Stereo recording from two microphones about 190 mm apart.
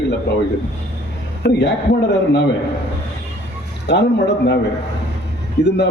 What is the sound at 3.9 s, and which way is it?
Speech, 65° left (ahead or behind).